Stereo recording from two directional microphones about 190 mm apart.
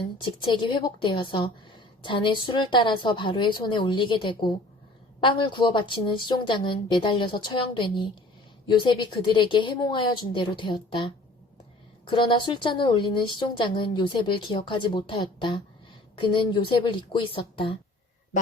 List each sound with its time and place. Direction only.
0.2 s a woman's voice: 25° left (ahead or behind)